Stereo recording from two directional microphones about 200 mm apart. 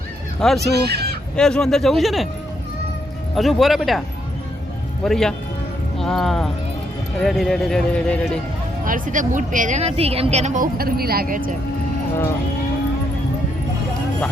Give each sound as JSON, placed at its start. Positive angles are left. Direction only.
{"t": 0.3, "sound": "speech", "side_deg": 0}
{"t": 0.6, "sound": "speech", "side_deg": -55}
{"t": 1.4, "sound": "speech", "side_deg": 5}
{"t": 3.3, "sound": "speech", "side_deg": 0}
{"t": 5.0, "sound": "speech", "side_deg": 0}
{"t": 8.8, "sound": "a woman's voice", "side_deg": -45}